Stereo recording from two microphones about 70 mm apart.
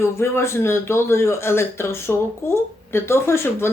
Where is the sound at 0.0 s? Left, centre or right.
Left.